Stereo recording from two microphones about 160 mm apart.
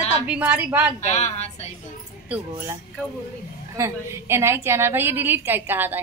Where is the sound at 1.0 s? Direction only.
45° left (ahead or behind).